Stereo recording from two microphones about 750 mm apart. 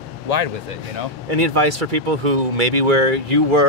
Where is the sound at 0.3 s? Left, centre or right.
Right.